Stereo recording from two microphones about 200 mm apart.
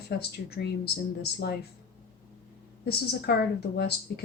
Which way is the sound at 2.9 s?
55° left (ahead or behind).